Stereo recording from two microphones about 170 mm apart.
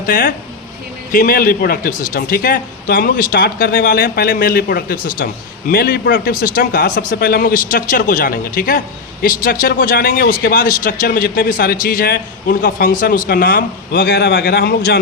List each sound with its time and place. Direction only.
0.0 s speech: 55° left (ahead or behind)